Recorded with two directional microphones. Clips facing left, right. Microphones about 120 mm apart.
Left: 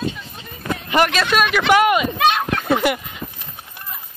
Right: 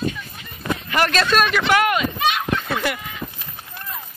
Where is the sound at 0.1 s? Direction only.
25° left (ahead or behind).